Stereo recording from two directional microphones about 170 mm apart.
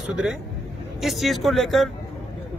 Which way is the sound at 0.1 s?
5° right (ahead or behind).